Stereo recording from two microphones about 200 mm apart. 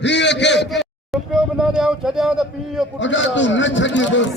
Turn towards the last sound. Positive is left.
turn(degrees=65)  # may be behind; listen again after turning